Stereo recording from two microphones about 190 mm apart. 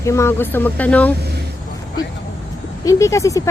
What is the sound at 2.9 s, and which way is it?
Speech, 15° left (ahead or behind).